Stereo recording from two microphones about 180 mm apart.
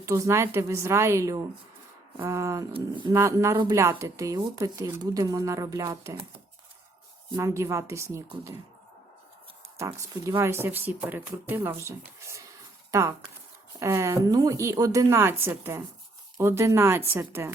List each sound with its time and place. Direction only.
0.0 s a woman's voice: 15° right (ahead or behind)
3.2 s a woman's voice: 15° right (ahead or behind)
7.3 s a woman's voice: 15° right (ahead or behind)
9.7 s a woman's voice: 15° right (ahead or behind)